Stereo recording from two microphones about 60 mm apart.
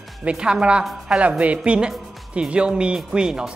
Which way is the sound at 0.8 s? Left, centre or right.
Centre.